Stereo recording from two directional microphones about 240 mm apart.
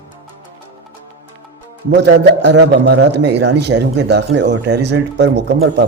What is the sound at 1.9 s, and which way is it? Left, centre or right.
A man's voice, right.